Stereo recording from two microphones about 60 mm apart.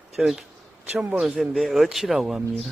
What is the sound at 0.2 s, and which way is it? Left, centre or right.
A man's voice, centre.